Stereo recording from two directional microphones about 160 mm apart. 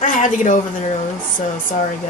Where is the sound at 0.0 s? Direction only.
55° left (ahead or behind).